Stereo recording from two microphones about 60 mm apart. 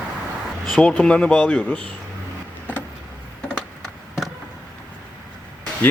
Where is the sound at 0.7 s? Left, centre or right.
Centre.